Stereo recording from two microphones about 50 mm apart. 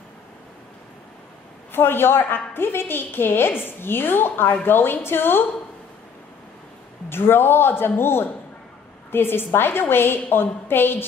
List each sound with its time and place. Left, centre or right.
1.7 s a woman's voice: left
7.1 s a woman's voice: left